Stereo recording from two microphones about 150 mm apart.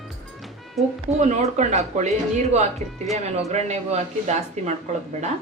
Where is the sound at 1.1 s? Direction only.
50° right (ahead or behind).